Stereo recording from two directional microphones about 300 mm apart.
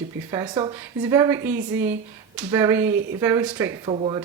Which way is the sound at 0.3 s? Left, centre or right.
Centre.